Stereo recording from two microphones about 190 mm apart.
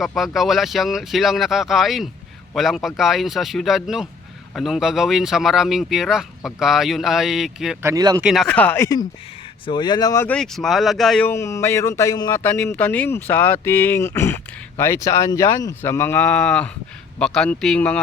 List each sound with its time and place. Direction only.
0.0 s speech: centre (ahead or behind)
7.8 s speech: 15° right (ahead or behind)
8.2 s speech: centre (ahead or behind)
9.6 s speech: 25° left (ahead or behind); by 18.0 s 5° left (ahead or behind)